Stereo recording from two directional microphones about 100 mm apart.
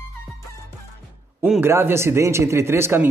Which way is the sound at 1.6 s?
25° right (ahead or behind).